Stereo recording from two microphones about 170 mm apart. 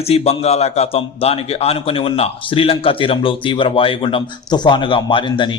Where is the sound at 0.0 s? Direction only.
35° left (ahead or behind).